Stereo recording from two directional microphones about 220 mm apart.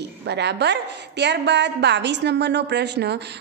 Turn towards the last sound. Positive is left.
turn(degrees=-50)  # may be behind; listen again after turning